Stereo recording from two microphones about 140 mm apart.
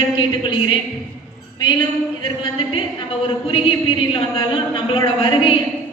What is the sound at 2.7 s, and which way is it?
A woman's voice, 40° left (ahead or behind).